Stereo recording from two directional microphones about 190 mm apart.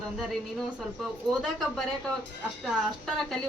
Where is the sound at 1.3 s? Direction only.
Centre (ahead or behind).